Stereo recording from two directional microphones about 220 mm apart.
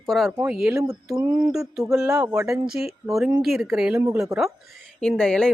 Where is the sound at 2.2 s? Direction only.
15° right (ahead or behind).